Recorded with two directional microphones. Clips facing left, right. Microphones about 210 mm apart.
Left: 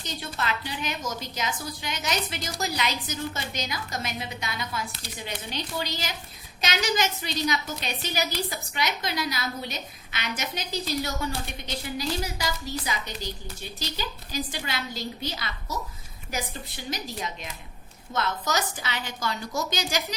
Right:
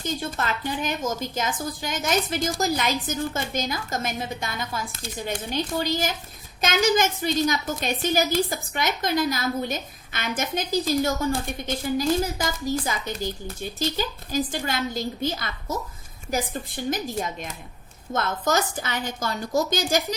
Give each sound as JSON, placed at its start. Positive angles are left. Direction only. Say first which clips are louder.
{"t": 0.0, "sound": "a woman's voice", "louder": "right 5 dB", "side_deg": -50}